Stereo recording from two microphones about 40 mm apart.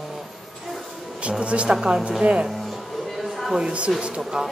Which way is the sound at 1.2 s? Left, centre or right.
Right.